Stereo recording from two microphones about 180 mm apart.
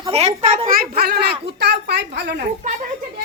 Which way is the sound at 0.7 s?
55° right (ahead or behind).